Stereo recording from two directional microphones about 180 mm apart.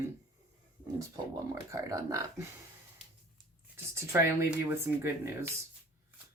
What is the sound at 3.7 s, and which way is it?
Speech, 15° right (ahead or behind).